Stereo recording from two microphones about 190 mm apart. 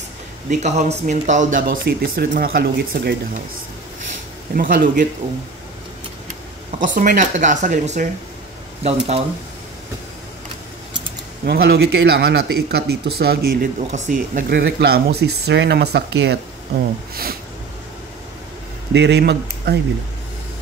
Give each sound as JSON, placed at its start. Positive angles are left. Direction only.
{"t": 0.5, "sound": "speech", "side_deg": -35}
{"t": 4.6, "sound": "speech", "side_deg": -45}
{"t": 6.8, "sound": "speech", "side_deg": -45}
{"t": 11.4, "sound": "speech", "side_deg": -60}
{"t": 18.9, "sound": "speech", "side_deg": -60}